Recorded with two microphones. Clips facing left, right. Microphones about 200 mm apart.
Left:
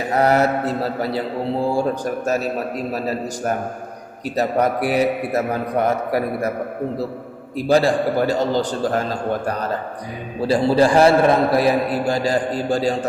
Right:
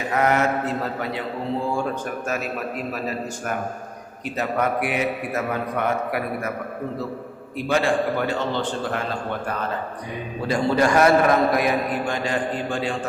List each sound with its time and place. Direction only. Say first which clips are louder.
0.1 s a man's voice: left 4 dB; 35° left (ahead or behind)
7.5 s a man's voice: left 5 dB; 35° left (ahead or behind)